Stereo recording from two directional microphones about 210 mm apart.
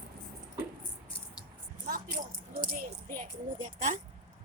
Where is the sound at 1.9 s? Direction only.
40° right (ahead or behind).